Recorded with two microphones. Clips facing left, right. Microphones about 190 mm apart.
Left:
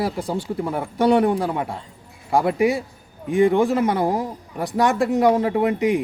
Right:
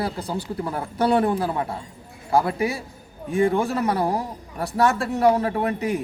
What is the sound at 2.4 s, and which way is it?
A man's voice, 20° left (ahead or behind).